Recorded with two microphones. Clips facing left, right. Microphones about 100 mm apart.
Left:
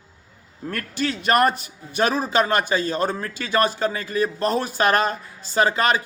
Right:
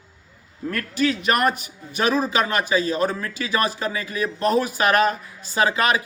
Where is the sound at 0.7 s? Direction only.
35° left (ahead or behind).